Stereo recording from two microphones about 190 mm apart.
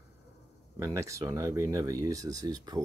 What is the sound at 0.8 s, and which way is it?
Speech, 15° right (ahead or behind).